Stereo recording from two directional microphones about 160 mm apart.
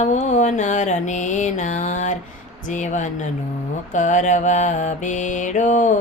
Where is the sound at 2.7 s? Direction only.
50° left (ahead or behind).